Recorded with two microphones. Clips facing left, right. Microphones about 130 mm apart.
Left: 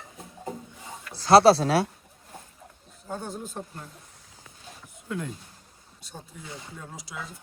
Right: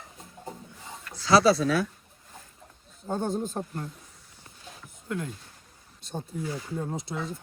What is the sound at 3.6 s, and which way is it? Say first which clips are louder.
Speech: right 4 dB; 35° right (ahead or behind).